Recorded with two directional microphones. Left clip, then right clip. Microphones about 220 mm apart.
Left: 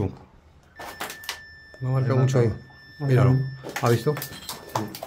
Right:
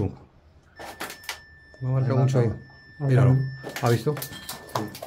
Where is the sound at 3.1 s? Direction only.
10° left (ahead or behind).